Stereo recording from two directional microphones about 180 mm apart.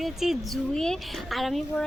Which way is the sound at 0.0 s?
Centre (ahead or behind).